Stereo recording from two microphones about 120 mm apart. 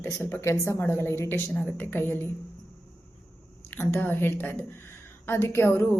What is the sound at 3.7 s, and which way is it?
A woman's voice, 15° left (ahead or behind).